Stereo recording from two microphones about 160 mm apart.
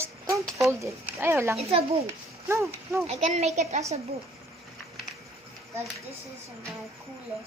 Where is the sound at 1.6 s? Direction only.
40° right (ahead or behind).